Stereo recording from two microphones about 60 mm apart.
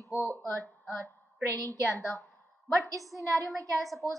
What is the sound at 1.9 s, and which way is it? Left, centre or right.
Speech, centre.